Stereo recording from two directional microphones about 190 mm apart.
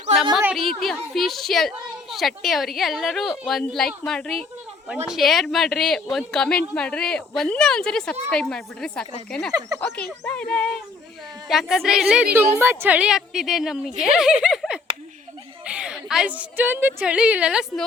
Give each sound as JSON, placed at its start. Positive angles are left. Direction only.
{"t": 0.3, "sound": "a woman's voice", "side_deg": 0}
{"t": 9.5, "sound": "speech", "side_deg": -20}
{"t": 9.8, "sound": "a woman's voice", "side_deg": 5}